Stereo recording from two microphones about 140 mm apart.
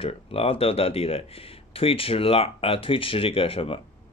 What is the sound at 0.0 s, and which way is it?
Speech, 45° left (ahead or behind).